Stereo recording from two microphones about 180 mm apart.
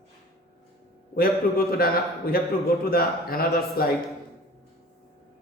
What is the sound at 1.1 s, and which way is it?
A man's voice, 55° left (ahead or behind).